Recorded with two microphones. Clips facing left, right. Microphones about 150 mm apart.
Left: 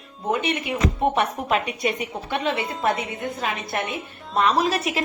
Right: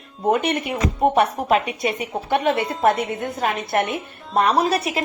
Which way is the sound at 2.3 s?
50° right (ahead or behind).